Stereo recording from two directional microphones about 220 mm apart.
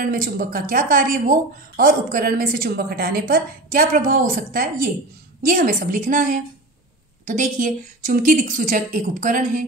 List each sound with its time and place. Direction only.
0.0 s speech: 40° right (ahead or behind)